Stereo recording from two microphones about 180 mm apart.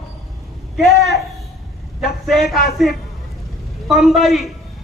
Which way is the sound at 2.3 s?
Centre (ahead or behind).